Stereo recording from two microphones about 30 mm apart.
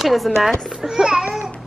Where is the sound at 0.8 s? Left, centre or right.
Right.